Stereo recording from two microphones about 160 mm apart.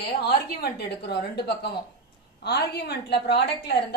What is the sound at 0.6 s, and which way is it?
A woman's voice, 90° left.